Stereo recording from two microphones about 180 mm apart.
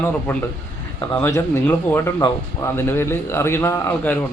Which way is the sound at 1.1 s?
15° left (ahead or behind).